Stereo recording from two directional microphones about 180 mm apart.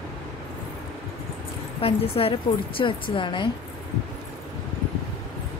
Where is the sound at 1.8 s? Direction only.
30° left (ahead or behind).